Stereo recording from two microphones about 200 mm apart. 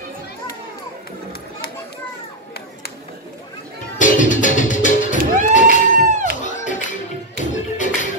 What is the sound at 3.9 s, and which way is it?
Music, 40° left (ahead or behind).